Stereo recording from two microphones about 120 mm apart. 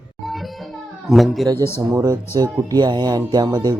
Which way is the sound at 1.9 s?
25° right (ahead or behind).